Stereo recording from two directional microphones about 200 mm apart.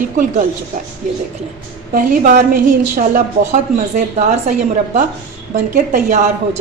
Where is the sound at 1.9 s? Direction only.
45° right (ahead or behind).